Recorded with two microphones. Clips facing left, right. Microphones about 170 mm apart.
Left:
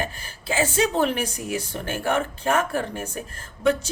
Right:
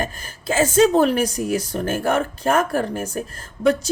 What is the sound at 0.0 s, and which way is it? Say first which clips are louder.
Speech: right 3 dB; 45° right (ahead or behind).